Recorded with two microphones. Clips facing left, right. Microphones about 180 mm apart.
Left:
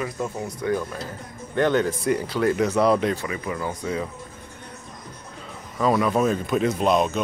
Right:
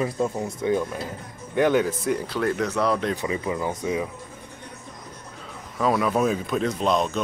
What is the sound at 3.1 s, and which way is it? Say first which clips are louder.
Speech: right 2 dB; 20° right (ahead or behind).